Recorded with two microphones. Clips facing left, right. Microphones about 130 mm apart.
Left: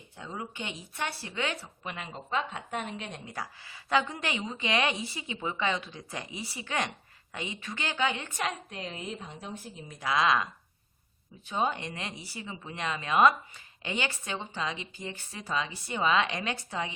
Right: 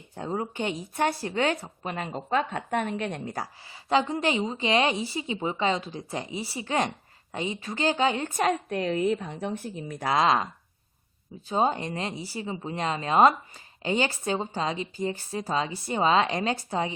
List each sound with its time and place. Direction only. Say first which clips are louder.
0.2 s speech: right 9 dB; 45° right (ahead or behind)
3.3 s a woman's voice: right 4 dB; 30° right (ahead or behind)
8.7 s a woman's voice: right 13 dB; 60° right (ahead or behind)
10.1 s a woman's voice: right 3 dB; 35° right (ahead or behind)